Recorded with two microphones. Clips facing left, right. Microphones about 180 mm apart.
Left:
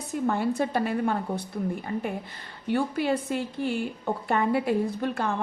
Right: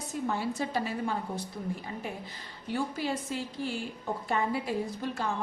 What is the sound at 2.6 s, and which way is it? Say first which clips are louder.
A woman's voice: left 6 dB; 60° left (ahead or behind).